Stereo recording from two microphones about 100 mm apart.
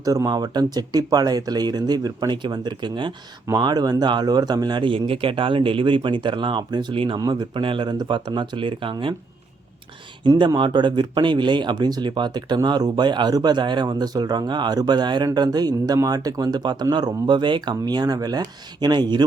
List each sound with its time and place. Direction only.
0.0 s speech: 35° right (ahead or behind); by 7.2 s 60° right (ahead or behind)
7.2 s speech: 40° right (ahead or behind)
7.6 s speech: 60° right (ahead or behind)
10.2 s speech: 50° right (ahead or behind)